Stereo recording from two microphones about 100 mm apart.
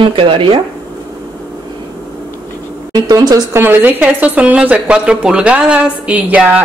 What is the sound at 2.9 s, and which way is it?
Speech, 40° right (ahead or behind).